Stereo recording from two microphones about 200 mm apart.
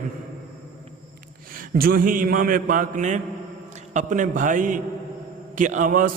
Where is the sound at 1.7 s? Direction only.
45° right (ahead or behind).